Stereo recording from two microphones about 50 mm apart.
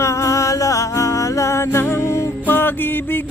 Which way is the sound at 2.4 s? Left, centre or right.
Left.